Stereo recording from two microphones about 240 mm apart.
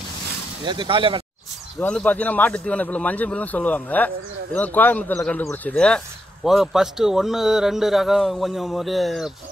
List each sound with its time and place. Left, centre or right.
0.7 s speech: centre
1.8 s speech: centre